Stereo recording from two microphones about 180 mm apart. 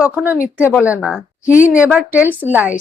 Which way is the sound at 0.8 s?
5° right (ahead or behind).